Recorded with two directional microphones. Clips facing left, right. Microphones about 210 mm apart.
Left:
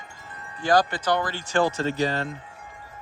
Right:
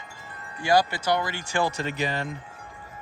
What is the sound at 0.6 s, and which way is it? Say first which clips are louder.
Speech: left 1 dB; 10° right (ahead or behind).